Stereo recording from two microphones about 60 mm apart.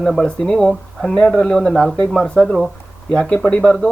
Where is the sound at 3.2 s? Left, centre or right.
Centre.